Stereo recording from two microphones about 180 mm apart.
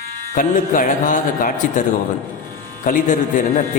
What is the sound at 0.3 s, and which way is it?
Speech, 50° left (ahead or behind).